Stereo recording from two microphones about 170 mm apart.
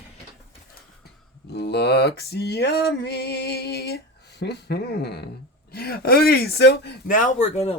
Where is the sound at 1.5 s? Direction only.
75° left (ahead or behind).